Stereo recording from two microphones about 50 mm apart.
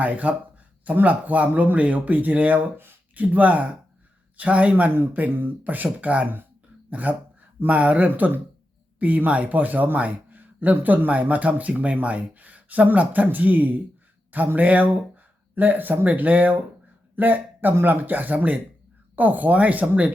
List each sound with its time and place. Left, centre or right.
0.0 s a man's voice: right